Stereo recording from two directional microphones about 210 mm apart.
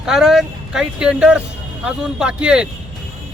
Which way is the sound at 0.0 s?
Centre (ahead or behind).